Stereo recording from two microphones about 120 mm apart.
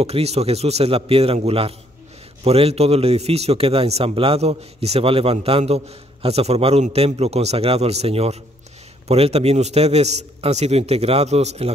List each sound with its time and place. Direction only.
0.0 s a man's voice: 60° right (ahead or behind)